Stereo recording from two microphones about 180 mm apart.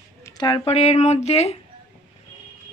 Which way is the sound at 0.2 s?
25° left (ahead or behind).